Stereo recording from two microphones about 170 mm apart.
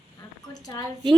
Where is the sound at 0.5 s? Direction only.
20° left (ahead or behind).